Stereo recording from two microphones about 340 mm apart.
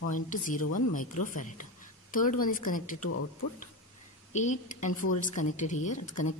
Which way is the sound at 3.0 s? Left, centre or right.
Left.